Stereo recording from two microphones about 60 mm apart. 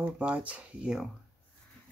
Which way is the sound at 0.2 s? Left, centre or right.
Right.